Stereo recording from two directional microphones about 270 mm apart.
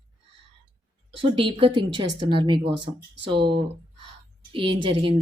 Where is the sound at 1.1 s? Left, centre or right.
Centre.